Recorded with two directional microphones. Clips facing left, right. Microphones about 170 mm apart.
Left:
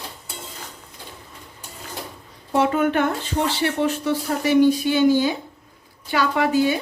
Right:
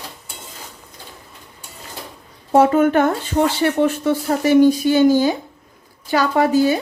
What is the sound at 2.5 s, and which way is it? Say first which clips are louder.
Speech: right 6 dB; 45° right (ahead or behind).